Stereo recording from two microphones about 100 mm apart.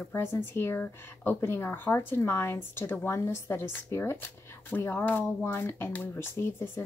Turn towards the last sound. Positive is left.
turn(degrees=25)  # may be behind; listen again after turning